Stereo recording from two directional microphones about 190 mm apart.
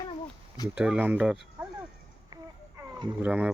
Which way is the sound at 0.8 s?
5° right (ahead or behind).